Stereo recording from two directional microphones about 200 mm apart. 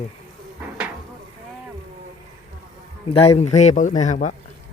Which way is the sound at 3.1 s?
30° left (ahead or behind).